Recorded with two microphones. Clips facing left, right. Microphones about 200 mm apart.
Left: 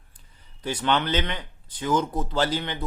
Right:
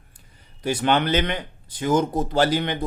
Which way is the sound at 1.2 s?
55° right (ahead or behind).